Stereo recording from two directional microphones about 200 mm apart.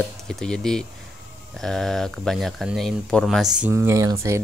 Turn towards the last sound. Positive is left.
turn(degrees=-15)  # may be behind; listen again after turning